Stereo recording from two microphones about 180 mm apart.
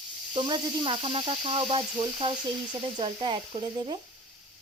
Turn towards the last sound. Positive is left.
turn(degrees=-25)  # may be behind; listen again after turning